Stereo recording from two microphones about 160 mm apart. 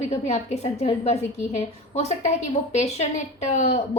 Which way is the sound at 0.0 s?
45° left (ahead or behind).